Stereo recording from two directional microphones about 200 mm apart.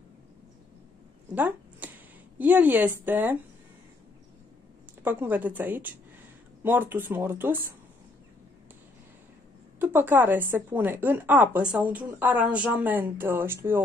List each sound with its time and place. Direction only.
1.3 s speech: 10° right (ahead or behind)
5.0 s speech: 10° right (ahead or behind)
9.8 s speech: 10° right (ahead or behind)